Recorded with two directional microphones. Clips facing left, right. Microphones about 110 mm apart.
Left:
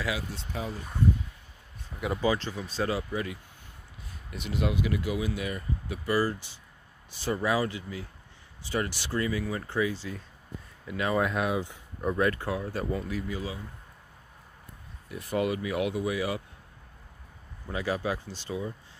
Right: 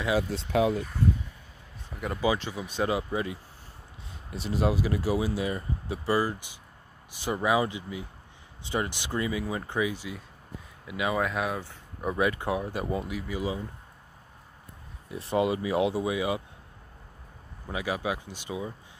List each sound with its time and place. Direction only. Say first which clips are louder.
0.5 s speech: right 12 dB; 80° right
1.9 s a sound: left 1 dB; 10° right (ahead or behind)
2.2 s speech: right 2 dB; 15° right (ahead or behind)
6.2 s speech: left 1 dB; 15° right (ahead or behind)
11.1 s speech: left 2 dB; centre (ahead or behind); by 13.6 s 15° right (ahead or behind)
15.0 s speech: right 3 dB; 25° right (ahead or behind)
17.6 s speech: even; 10° right (ahead or behind)